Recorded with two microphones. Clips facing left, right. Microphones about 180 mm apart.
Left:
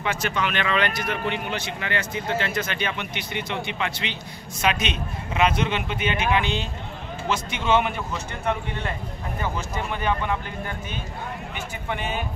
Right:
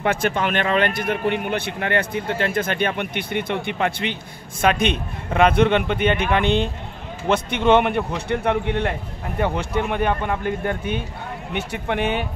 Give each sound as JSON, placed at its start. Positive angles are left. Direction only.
{"t": 0.0, "sound": "a man's voice", "side_deg": -55}
{"t": 11.5, "sound": "a man's voice", "side_deg": -70}